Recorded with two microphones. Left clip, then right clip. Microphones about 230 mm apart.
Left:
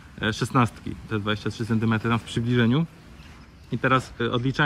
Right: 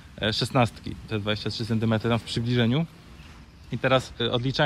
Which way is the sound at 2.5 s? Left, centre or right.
Centre.